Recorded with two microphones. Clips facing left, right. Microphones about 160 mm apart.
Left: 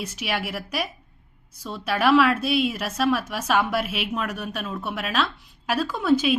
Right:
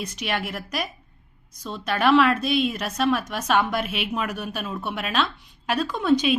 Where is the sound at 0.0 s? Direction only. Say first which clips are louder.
Even; 5° left (ahead or behind).